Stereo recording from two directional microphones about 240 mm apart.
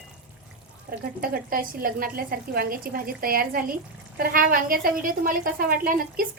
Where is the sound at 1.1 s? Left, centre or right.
Right.